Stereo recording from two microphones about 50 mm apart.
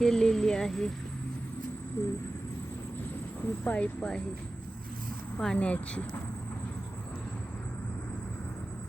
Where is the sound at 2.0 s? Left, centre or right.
Left.